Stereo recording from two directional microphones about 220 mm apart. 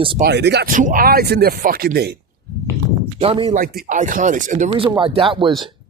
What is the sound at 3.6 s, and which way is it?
Speech, 40° right (ahead or behind).